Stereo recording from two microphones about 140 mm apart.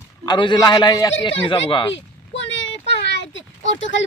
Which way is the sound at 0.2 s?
30° left (ahead or behind).